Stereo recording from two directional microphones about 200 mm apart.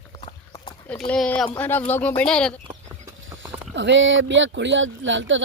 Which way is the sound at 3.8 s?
65° right (ahead or behind).